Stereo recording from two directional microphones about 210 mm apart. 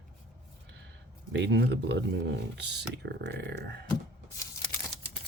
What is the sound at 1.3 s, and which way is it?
Speech, 55° right (ahead or behind).